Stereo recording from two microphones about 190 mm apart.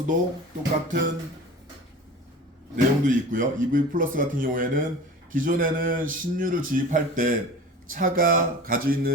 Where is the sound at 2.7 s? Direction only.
45° right (ahead or behind).